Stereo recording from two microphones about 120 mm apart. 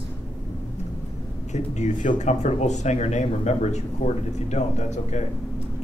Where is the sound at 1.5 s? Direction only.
75° left (ahead or behind).